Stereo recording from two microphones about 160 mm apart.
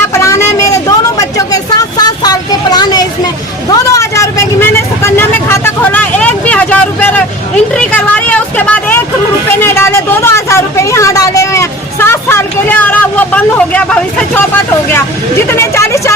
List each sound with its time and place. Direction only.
0.1 s vehicle: 20° left (ahead or behind)
9.6 s a sound: 15° left (ahead or behind)
15.4 s vehicle: 15° left (ahead or behind)